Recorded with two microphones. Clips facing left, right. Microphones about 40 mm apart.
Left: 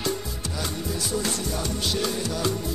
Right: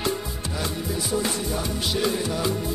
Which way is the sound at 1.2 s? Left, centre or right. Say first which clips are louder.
Right 2 dB; centre.